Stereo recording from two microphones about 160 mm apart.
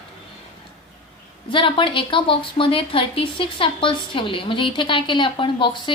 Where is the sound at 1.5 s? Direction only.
30° left (ahead or behind).